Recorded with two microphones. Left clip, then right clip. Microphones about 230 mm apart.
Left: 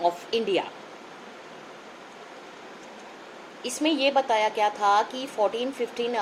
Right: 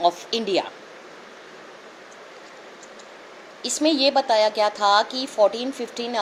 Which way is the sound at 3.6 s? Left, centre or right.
Right.